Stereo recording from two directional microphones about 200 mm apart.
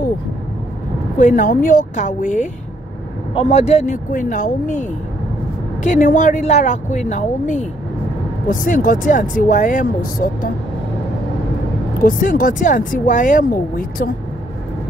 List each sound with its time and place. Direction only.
1.1 s speech: 40° left (ahead or behind)
12.0 s speech: 45° left (ahead or behind)